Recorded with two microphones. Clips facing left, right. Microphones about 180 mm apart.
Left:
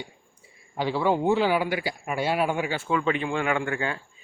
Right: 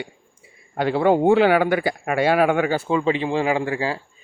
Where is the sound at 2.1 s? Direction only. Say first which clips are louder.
Right 7 dB; 90° right; by 2.7 s 70° right (ahead or behind).